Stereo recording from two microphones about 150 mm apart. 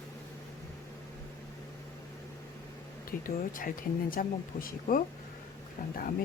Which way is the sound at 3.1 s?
70° left (ahead or behind).